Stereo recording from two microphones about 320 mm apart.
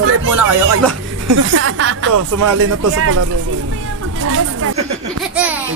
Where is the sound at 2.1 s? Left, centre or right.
Right.